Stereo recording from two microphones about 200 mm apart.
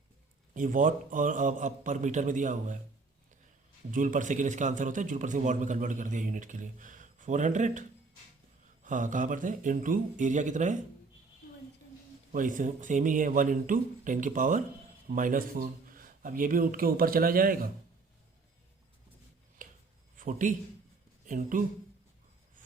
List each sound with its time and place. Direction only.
0.5 s a man's voice: 40° right (ahead or behind)
3.9 s a man's voice: 40° right (ahead or behind)
12.3 s a man's voice: 40° right (ahead or behind)
19.6 s a sound: 40° right (ahead or behind)
20.1 s a man's voice: 40° right (ahead or behind)